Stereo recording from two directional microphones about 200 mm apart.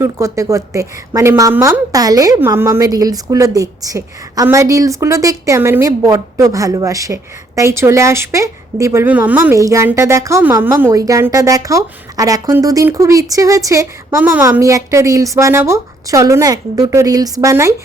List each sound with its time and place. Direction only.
0.0 s a woman's voice: 15° right (ahead or behind)